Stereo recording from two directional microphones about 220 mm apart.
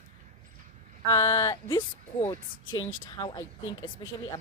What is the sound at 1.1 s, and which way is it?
Speech, 15° left (ahead or behind).